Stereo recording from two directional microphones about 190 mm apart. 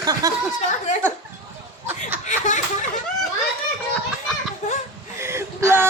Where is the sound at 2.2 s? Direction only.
40° left (ahead or behind).